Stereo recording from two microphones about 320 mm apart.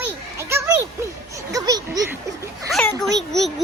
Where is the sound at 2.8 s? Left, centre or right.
Centre.